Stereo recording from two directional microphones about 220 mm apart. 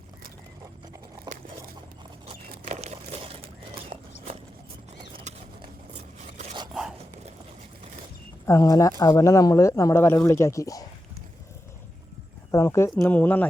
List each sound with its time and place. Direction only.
2.2 s a sound: 30° right (ahead or behind)
3.9 s horse: 30° right (ahead or behind)
5.3 s a sound: 30° right (ahead or behind)
6.1 s zipper: 30° right (ahead or behind)
8.4 s speech: 15° left (ahead or behind)
12.5 s speech: 15° left (ahead or behind)